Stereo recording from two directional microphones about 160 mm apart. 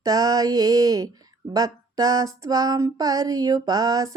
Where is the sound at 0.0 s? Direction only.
20° right (ahead or behind).